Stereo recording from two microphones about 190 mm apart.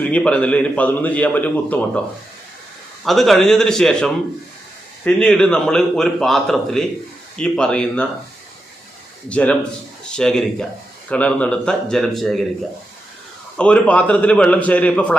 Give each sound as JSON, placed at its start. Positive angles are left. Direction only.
{"t": 0.0, "sound": "a man's voice", "side_deg": 5}
{"t": 3.0, "sound": "a man's voice", "side_deg": 0}
{"t": 9.3, "sound": "a man's voice", "side_deg": 5}
{"t": 13.6, "sound": "a man's voice", "side_deg": 5}